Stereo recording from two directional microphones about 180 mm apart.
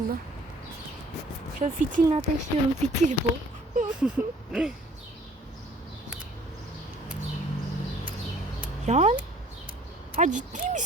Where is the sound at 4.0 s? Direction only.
5° right (ahead or behind).